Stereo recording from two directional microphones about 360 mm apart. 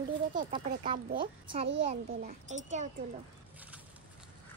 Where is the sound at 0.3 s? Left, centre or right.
Centre.